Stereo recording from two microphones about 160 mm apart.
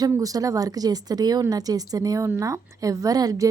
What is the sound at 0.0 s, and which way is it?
Speech, 20° right (ahead or behind).